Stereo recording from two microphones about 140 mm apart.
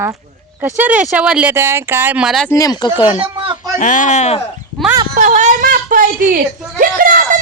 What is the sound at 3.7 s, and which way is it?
Speech, 65° left (ahead or behind).